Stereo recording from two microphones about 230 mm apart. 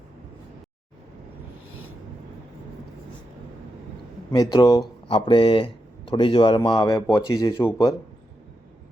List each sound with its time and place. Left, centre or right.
4.3 s speech: centre